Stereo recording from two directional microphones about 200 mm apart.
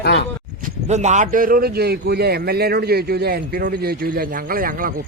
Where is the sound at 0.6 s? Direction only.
35° right (ahead or behind).